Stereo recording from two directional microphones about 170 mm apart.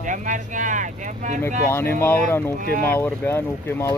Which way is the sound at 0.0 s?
50° right (ahead or behind).